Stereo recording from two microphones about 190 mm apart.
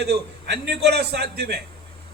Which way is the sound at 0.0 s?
60° right (ahead or behind).